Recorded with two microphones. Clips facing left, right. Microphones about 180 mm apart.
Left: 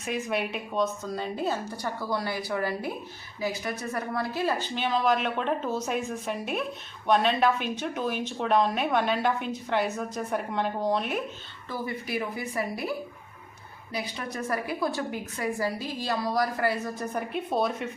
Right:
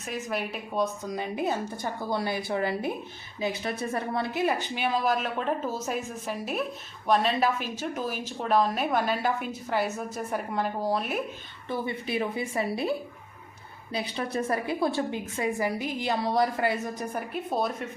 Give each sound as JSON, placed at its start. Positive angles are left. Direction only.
{"t": 0.0, "sound": "a woman's voice", "side_deg": 0}
{"t": 0.8, "sound": "a woman's voice", "side_deg": -15}
{"t": 11.7, "sound": "a woman's voice", "side_deg": -25}